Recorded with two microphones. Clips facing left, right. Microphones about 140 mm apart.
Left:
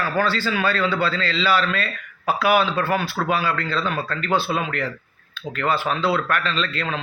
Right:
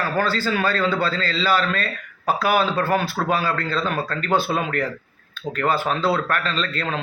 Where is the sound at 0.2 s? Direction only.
40° right (ahead or behind).